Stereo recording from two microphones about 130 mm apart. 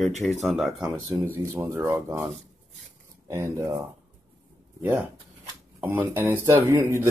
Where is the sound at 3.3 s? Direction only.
20° right (ahead or behind).